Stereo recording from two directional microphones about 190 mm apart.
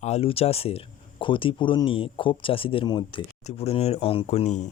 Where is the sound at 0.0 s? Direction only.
30° left (ahead or behind).